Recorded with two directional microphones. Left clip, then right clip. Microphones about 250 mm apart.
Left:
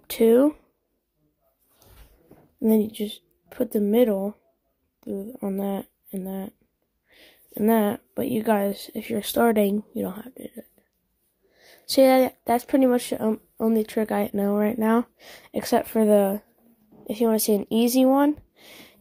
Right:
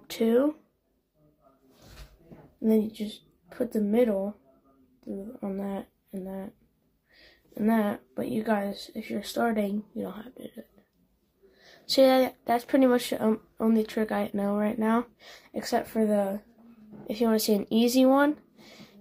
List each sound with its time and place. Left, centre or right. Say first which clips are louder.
0.0 s speech: left 7 dB; left
2.6 s speech: left 4 dB; left